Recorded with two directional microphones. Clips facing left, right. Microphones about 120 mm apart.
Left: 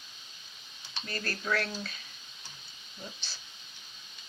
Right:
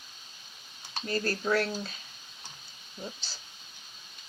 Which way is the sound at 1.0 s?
30° right (ahead or behind).